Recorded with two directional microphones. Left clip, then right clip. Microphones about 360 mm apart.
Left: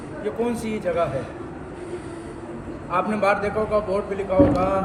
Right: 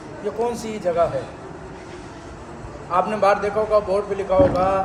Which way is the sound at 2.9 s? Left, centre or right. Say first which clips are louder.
Right 3 dB; right.